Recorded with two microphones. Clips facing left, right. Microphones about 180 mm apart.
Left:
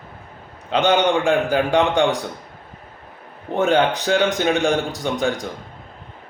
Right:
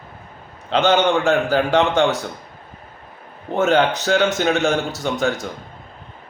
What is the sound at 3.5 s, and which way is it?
A man's voice, 15° left (ahead or behind).